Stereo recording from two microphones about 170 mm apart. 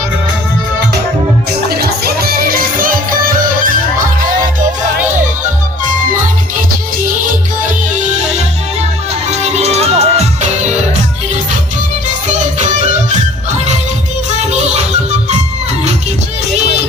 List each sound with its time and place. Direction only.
1.7 s music: 65° right (ahead or behind)
9.3 s music: 40° right (ahead or behind)
12.5 s music: 45° right (ahead or behind)
16.6 s music: 40° right (ahead or behind)